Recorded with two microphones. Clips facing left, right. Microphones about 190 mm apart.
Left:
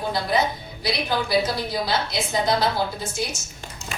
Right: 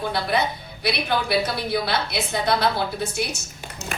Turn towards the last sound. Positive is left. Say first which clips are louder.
# right 2 dB
turn(degrees=-65)  # may be behind; listen again after turning